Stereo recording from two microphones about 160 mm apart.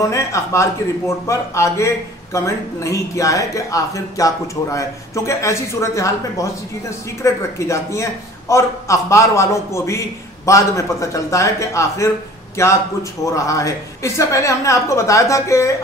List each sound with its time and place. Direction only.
0.0 s a man's voice: 20° left (ahead or behind)